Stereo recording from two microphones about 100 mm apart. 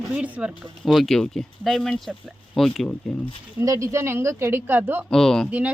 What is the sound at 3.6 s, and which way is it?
A woman's voice, 30° right (ahead or behind).